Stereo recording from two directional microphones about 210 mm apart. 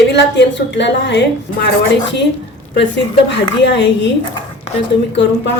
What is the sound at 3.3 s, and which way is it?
Speech, 55° left (ahead or behind).